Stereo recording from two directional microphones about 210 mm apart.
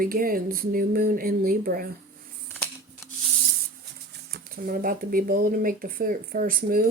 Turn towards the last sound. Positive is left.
turn(degrees=-40)  # may be behind; listen again after turning